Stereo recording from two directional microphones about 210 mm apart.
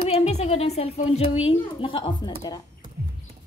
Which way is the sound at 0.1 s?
30° left (ahead or behind).